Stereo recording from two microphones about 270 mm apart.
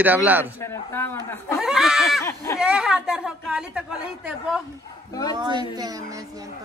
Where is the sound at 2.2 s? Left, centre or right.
Centre.